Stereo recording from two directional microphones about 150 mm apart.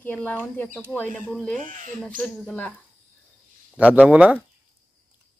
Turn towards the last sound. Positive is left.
turn(degrees=-10)  # may be behind; listen again after turning